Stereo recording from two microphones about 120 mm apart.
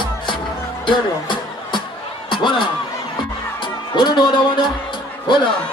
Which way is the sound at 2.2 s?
40° left (ahead or behind).